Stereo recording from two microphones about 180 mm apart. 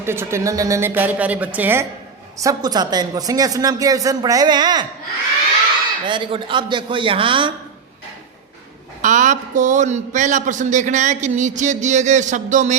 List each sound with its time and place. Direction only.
0.0 s a woman's voice: 15° right (ahead or behind)
6.1 s speech: 25° right (ahead or behind)
9.0 s a man's voice: 45° right (ahead or behind)